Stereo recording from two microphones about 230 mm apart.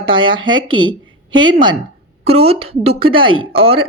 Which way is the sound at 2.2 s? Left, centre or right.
Right.